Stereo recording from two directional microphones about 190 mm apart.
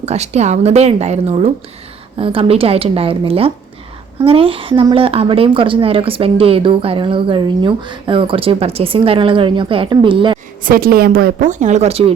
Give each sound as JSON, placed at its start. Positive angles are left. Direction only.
{"t": 0.0, "sound": "a woman's voice", "side_deg": -35}
{"t": 10.6, "sound": "a woman's voice", "side_deg": -50}